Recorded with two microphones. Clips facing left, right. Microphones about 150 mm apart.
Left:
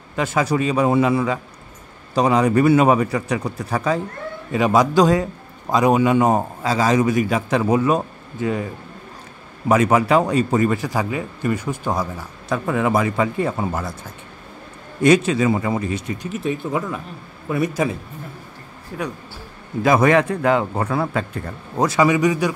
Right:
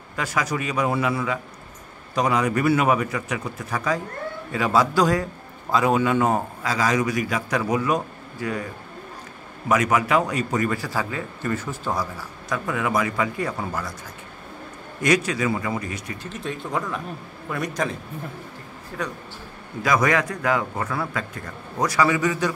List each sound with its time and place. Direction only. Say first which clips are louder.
0.1 s speech: left 6 dB; 25° left (ahead or behind)
4.5 s speech: left 4 dB; 20° left (ahead or behind)
9.7 s speech: left 5 dB; 30° left (ahead or behind)
15.0 s speech: left 6 dB; 25° left (ahead or behind)
16.2 s speech: left 7 dB; 5° left (ahead or behind)
18.9 s a man's voice: left 3 dB; 15° left (ahead or behind)
19.8 s a man's voice: left 6 dB; 25° left (ahead or behind)